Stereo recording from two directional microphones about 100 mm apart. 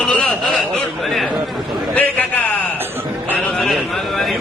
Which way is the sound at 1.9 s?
15° left (ahead or behind).